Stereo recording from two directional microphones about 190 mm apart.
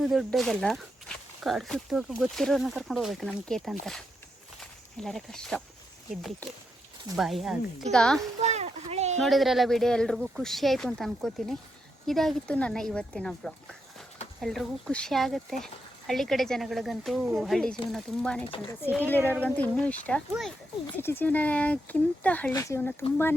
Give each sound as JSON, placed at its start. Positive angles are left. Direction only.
{"t": 0.0, "sound": "speech", "side_deg": 0}
{"t": 4.9, "sound": "speech", "side_deg": 0}
{"t": 7.2, "sound": "speech", "side_deg": 0}
{"t": 8.4, "sound": "a sound", "side_deg": -35}
{"t": 9.1, "sound": "speech", "side_deg": 0}